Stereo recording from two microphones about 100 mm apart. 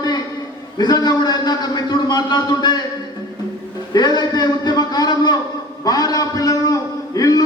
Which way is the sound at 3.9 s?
45° left (ahead or behind).